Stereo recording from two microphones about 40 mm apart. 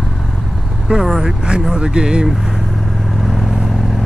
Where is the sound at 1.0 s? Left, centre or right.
Centre.